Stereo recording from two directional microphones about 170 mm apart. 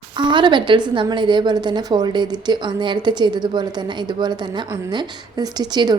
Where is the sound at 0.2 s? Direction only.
30° right (ahead or behind).